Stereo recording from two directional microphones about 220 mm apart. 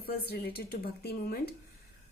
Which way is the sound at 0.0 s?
45° left (ahead or behind).